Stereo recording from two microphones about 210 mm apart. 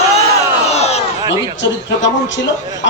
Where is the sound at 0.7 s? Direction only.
30° left (ahead or behind).